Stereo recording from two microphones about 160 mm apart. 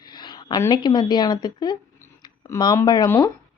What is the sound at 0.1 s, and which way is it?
A woman's voice, 25° left (ahead or behind).